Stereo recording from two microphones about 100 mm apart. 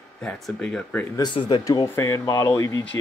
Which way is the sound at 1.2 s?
50° left (ahead or behind).